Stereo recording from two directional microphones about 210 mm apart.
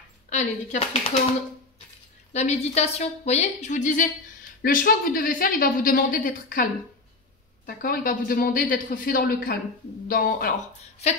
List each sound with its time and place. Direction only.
0.3 s a woman's voice: 35° left (ahead or behind)
2.3 s a woman's voice: 30° left (ahead or behind)